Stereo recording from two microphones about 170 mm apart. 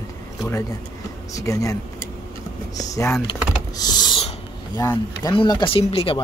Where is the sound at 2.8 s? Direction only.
20° left (ahead or behind).